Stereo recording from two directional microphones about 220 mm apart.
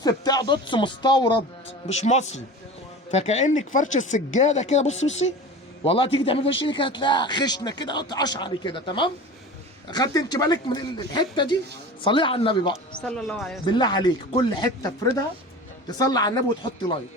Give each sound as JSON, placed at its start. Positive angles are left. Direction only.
{"t": 0.0, "sound": "speech", "side_deg": 20}
{"t": 1.9, "sound": "a man's voice", "side_deg": 30}
{"t": 13.1, "sound": "speech", "side_deg": 0}
{"t": 13.7, "sound": "a man's voice", "side_deg": 20}